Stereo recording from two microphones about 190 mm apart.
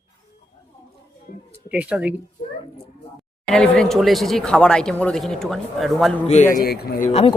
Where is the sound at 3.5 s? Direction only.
5° left (ahead or behind).